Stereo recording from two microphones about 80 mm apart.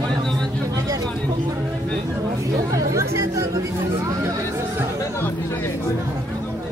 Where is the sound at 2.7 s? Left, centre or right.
Right.